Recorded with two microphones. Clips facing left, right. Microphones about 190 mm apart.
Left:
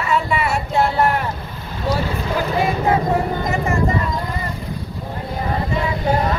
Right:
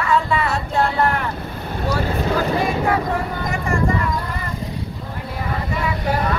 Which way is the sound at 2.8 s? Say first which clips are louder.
Left 3 dB; 20° left (ahead or behind).